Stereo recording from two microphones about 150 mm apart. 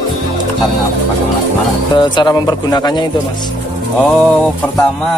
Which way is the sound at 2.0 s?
30° left (ahead or behind).